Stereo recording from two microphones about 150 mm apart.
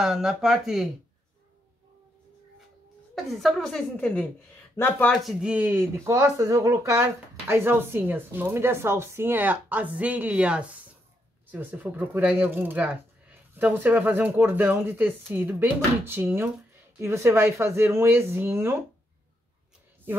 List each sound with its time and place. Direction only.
0.0 s a woman's voice: 5° right (ahead or behind)
3.3 s a woman's voice: centre (ahead or behind)
5.1 s speech: centre (ahead or behind)